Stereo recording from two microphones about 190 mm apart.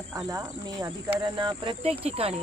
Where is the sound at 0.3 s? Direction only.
20° right (ahead or behind).